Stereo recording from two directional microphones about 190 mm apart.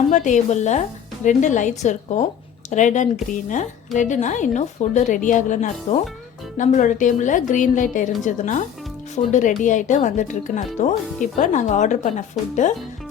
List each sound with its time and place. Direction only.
0.1 s a woman's voice: 40° left (ahead or behind)